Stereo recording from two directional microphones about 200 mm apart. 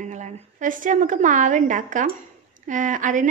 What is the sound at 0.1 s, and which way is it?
A woman's voice, 40° right (ahead or behind).